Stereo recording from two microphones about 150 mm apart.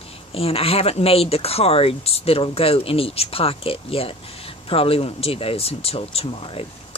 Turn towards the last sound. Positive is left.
turn(degrees=40)  # may be behind; listen again after turning